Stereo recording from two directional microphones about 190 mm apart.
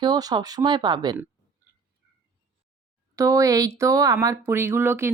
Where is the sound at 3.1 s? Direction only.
15° right (ahead or behind).